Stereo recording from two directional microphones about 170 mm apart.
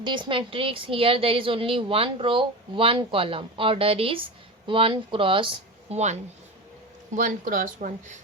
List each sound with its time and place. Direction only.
0.0 s a woman's voice: 30° right (ahead or behind)
5.9 s a woman's voice: 40° right (ahead or behind)